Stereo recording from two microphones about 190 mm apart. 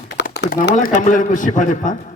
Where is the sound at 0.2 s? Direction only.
65° left (ahead or behind).